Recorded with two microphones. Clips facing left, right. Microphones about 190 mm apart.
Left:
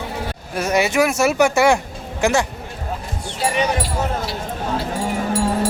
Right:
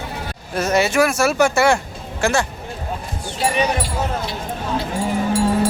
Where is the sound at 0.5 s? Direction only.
15° left (ahead or behind).